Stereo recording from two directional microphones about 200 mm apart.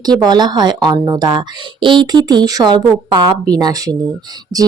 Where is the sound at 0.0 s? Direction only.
20° right (ahead or behind).